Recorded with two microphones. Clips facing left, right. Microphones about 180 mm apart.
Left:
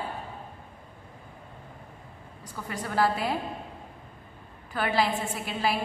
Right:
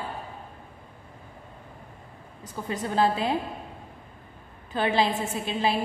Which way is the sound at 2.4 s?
20° right (ahead or behind).